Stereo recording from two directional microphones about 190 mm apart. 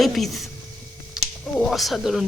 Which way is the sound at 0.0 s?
Centre (ahead or behind).